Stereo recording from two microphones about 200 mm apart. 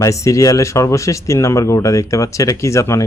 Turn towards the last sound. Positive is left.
turn(degrees=15)  # may be behind; listen again after turning